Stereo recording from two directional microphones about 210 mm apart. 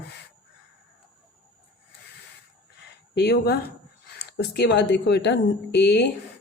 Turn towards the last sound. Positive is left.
turn(degrees=55)  # may be behind; listen again after turning